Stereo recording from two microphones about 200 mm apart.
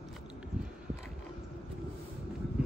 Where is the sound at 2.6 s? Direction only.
5° right (ahead or behind).